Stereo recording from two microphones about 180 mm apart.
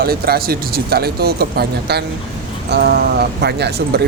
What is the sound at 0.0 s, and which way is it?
Speech, 55° right (ahead or behind).